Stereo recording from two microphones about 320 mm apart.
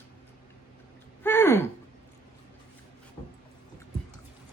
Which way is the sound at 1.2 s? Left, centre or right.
Centre.